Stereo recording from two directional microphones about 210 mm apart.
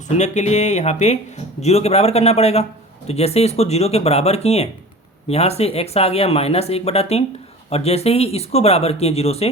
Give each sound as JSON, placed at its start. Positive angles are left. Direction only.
{"t": 0.2, "sound": "a man's voice", "side_deg": 35}